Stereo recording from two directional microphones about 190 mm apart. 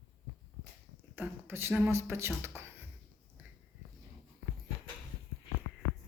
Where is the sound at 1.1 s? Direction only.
10° right (ahead or behind).